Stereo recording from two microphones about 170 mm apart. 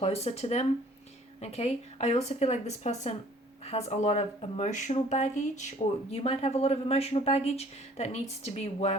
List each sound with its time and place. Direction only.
0.0 s speech: 40° left (ahead or behind)